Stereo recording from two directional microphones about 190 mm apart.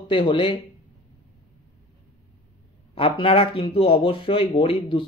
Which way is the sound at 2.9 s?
30° left (ahead or behind).